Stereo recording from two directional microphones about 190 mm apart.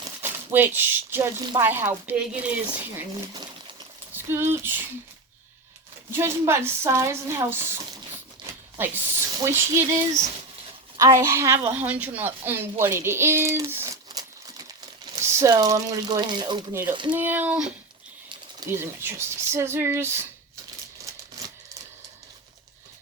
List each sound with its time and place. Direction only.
0.2 s a woman's voice: 10° right (ahead or behind)
6.1 s a woman's voice: 15° right (ahead or behind)
8.8 s a woman's voice: 10° right (ahead or behind)
17.1 s a woman's voice: 10° right (ahead or behind)
18.7 s a woman's voice: 10° right (ahead or behind)
21.0 s typewriter: 15° right (ahead or behind)